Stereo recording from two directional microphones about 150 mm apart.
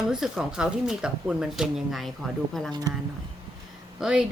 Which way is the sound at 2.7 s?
25° right (ahead or behind).